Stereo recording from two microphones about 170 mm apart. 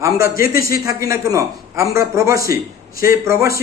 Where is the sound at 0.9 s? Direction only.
20° right (ahead or behind).